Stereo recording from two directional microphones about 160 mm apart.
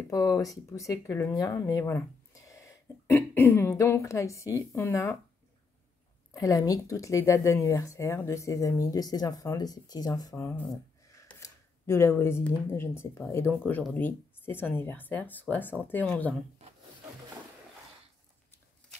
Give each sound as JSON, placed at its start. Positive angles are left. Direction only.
{"t": 0.1, "sound": "speech", "side_deg": 20}
{"t": 6.3, "sound": "speech", "side_deg": 20}